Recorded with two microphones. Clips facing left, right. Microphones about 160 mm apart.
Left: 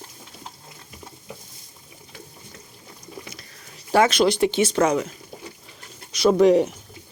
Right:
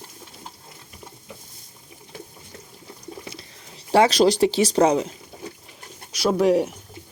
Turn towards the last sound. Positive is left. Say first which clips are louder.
# left 3 dB
turn(degrees=-5)  # may be behind; listen again after turning